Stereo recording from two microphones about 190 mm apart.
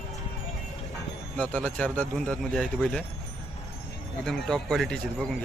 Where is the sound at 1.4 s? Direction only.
5° left (ahead or behind).